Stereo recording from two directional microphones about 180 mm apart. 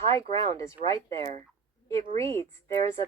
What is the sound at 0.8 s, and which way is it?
Speech, 15° left (ahead or behind).